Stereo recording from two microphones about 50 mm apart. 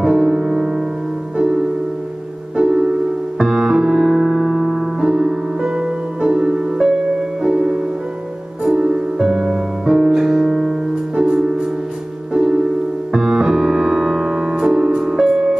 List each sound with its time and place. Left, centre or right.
0.0 s music: centre
1.3 s music: centre
11.1 s music: centre